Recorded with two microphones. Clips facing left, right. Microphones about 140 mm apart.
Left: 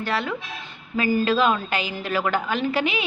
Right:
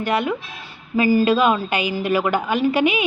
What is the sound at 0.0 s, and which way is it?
A woman's voice, 15° right (ahead or behind).